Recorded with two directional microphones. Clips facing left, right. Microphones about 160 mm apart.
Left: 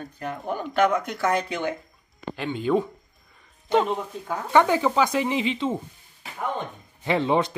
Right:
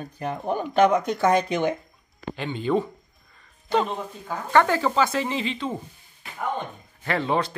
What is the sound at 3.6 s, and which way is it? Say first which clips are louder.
Speech: left 2 dB; 20° left (ahead or behind).